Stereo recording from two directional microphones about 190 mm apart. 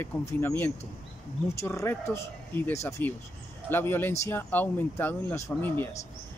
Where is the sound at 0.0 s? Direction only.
15° left (ahead or behind).